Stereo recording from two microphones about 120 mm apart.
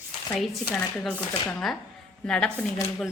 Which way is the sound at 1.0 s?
5° left (ahead or behind).